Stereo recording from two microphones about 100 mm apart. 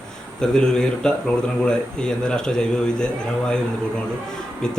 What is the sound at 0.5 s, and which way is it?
Speech, 5° left (ahead or behind).